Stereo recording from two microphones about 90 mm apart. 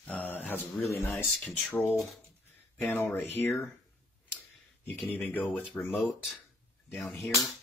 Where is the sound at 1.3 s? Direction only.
5° left (ahead or behind).